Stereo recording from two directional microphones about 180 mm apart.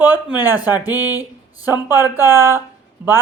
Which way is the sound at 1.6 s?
10° right (ahead or behind).